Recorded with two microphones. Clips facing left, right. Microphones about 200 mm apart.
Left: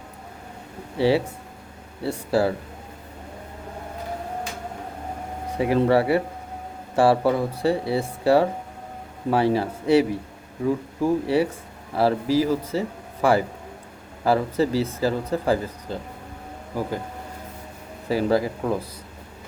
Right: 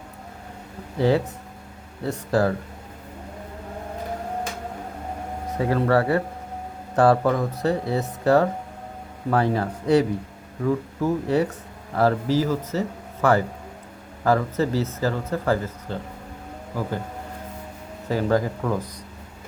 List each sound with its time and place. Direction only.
0.9 s speech: 5° left (ahead or behind)
5.5 s speech: 15° left (ahead or behind)
18.1 s speech: 10° left (ahead or behind)